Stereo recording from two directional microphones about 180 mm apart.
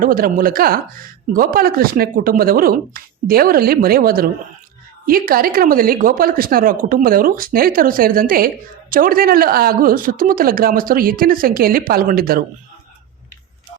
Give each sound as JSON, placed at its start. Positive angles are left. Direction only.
{"t": 0.0, "sound": "speech", "side_deg": -50}